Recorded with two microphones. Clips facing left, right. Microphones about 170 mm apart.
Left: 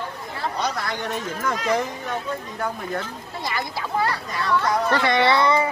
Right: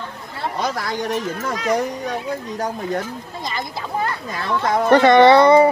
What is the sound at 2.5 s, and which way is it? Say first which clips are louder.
Speech: right 5 dB; 40° right (ahead or behind).